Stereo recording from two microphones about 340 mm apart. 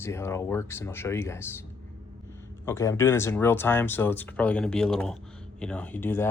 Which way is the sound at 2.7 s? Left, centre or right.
Centre.